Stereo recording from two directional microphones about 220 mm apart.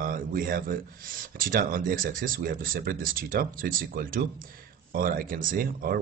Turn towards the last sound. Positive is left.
turn(degrees=-40)  # may be behind; listen again after turning